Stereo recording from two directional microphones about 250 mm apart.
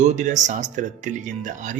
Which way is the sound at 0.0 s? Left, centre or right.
Right.